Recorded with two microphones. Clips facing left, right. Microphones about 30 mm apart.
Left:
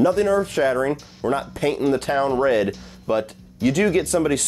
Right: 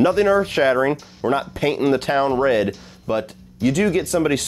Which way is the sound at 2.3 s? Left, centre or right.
Centre.